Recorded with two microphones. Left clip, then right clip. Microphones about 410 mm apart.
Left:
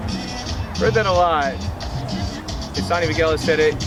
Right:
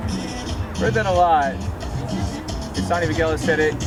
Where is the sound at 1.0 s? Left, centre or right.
Centre.